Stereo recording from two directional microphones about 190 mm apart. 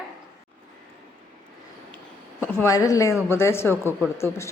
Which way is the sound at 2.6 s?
15° left (ahead or behind).